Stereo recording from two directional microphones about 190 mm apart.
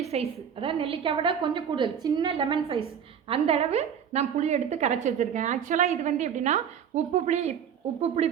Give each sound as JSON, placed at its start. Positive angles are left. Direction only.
{"t": 0.0, "sound": "a sound", "side_deg": -35}
{"t": 0.6, "sound": "a woman's voice", "side_deg": -30}
{"t": 2.3, "sound": "a woman's voice", "side_deg": -30}